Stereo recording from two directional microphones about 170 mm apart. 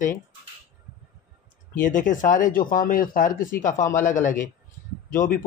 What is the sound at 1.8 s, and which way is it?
Speech, 50° left (ahead or behind).